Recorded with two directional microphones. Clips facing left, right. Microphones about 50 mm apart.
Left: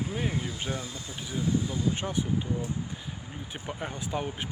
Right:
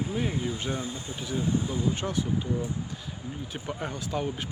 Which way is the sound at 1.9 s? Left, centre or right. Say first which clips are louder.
Right 1 dB; centre.